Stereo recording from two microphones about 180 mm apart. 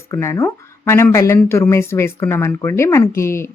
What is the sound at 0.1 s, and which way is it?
Speech, 15° left (ahead or behind).